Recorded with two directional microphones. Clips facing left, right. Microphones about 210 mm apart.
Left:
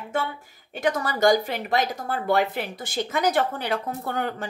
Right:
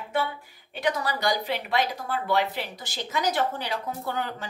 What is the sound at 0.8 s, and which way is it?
Speech, 50° left (ahead or behind).